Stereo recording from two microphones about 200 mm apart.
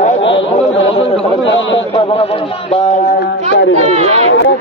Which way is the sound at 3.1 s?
60° left (ahead or behind).